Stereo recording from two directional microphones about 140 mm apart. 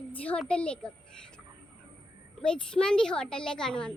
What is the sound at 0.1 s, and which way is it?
Speech, 10° left (ahead or behind).